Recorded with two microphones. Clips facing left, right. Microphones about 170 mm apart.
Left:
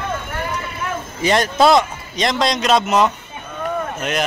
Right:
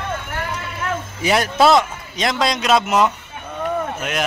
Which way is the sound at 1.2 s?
5° right (ahead or behind).